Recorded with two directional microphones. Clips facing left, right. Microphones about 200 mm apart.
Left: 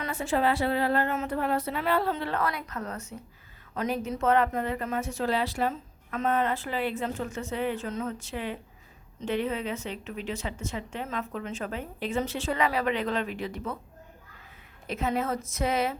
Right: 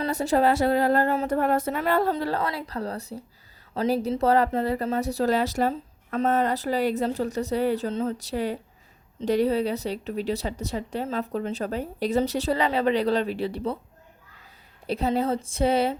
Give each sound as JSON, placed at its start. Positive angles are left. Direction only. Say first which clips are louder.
{"t": 0.0, "sound": "speech", "louder": "right 5 dB", "side_deg": -40}
{"t": 1.4, "sound": "speech", "louder": "right 5 dB", "side_deg": -45}
{"t": 14.8, "sound": "speech", "louder": "right 5 dB", "side_deg": -35}